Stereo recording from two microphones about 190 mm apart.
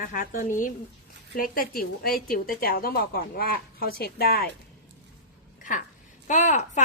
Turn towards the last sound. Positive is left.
turn(degrees=40)  # may be behind; listen again after turning